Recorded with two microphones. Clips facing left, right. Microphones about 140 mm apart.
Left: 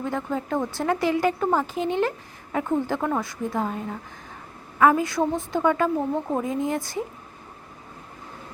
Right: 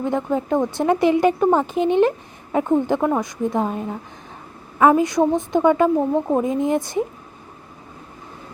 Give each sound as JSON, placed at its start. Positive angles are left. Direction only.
{"t": 0.0, "sound": "speech", "side_deg": -20}